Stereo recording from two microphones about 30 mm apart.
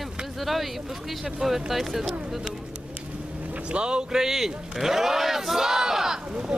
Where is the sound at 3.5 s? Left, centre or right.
Right.